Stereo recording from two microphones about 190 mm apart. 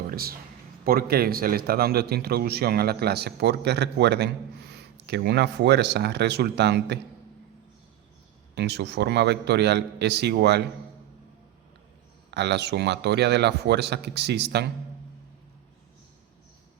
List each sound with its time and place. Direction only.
0.1 s a sound: 50° right (ahead or behind)
0.9 s a man's voice: 55° right (ahead or behind)
8.5 s a man's voice: 65° right (ahead or behind)
12.3 s a man's voice: 60° right (ahead or behind)